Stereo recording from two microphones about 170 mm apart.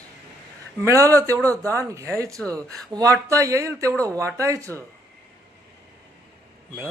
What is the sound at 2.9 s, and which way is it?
Speech, 20° right (ahead or behind).